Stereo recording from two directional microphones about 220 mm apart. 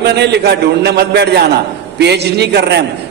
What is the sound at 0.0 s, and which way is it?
A man's voice, 50° right (ahead or behind).